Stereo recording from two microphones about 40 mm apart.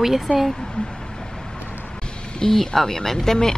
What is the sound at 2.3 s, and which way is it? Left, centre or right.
Speech, centre.